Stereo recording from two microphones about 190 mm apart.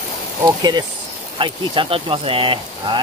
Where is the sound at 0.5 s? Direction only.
20° right (ahead or behind).